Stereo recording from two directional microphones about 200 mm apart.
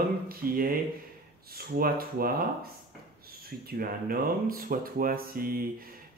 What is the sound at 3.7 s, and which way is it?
Speech, 45° right (ahead or behind).